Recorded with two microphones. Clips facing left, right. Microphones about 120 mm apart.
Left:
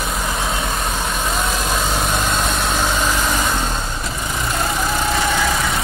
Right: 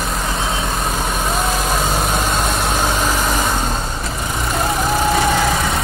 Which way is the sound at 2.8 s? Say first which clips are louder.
Right 1 dB; 15° right (ahead or behind).